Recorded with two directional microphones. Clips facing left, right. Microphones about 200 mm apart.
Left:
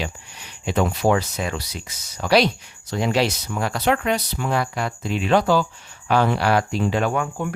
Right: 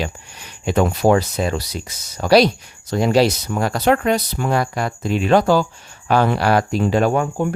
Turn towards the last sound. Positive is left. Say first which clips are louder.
# right 5 dB
turn(degrees=-35)  # may be behind; listen again after turning